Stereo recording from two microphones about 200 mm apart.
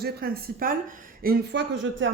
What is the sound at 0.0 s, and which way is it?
Speech, 50° right (ahead or behind).